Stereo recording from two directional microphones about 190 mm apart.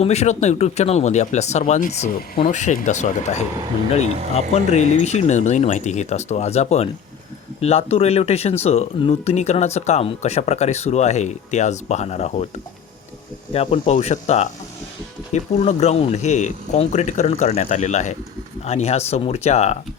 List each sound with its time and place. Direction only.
0.0 s speech: 35° left (ahead or behind)
13.5 s speech: 30° left (ahead or behind)